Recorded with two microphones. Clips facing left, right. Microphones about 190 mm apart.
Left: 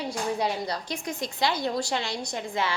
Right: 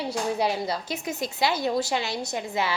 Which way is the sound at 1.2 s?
5° right (ahead or behind).